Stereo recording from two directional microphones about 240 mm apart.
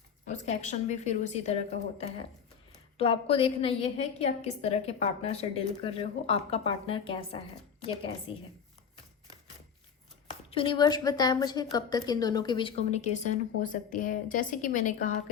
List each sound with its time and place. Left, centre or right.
0.3 s a woman's voice: left
3.0 s a woman's voice: left
10.5 s a woman's voice: left